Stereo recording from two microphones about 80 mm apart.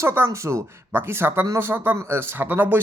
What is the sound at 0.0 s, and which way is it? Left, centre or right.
Speech, right.